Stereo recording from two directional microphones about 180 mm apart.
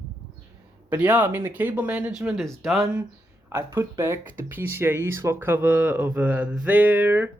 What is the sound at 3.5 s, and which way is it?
Speech, 20° right (ahead or behind).